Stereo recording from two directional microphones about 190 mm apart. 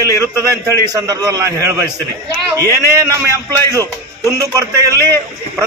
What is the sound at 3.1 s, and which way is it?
A man's voice, 15° right (ahead or behind).